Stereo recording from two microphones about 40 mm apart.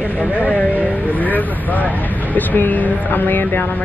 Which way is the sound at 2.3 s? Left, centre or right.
Left.